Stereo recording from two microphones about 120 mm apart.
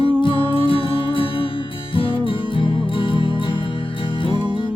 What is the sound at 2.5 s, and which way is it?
Music, 45° left (ahead or behind).